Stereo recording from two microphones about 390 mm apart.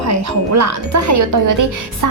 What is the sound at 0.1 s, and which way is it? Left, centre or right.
Speech, right.